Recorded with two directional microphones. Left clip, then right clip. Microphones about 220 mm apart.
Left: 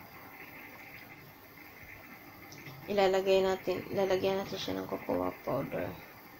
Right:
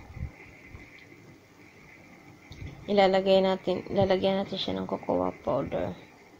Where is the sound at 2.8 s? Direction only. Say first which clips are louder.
Right 5 dB; 20° right (ahead or behind).